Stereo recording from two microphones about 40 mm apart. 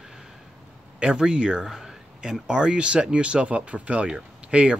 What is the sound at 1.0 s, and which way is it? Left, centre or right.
Speech, right.